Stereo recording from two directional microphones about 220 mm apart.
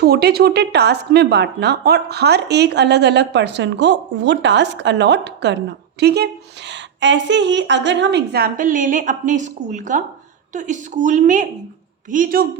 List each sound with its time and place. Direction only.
0.0 s a woman's voice: 45° right (ahead or behind)